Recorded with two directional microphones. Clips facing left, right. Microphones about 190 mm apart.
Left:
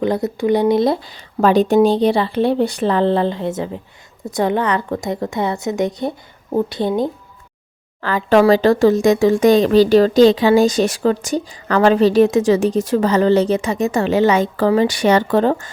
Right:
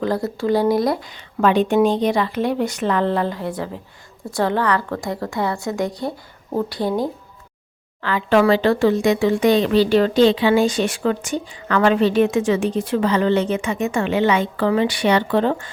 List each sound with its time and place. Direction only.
0.0 s speech: 20° left (ahead or behind)
8.0 s speech: 40° left (ahead or behind)